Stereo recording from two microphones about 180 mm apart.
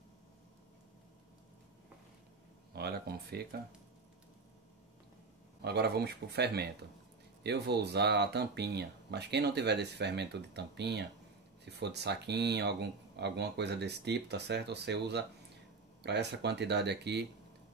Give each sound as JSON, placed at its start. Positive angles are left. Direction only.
{"t": 2.7, "sound": "speech", "side_deg": -60}
{"t": 5.6, "sound": "speech", "side_deg": -65}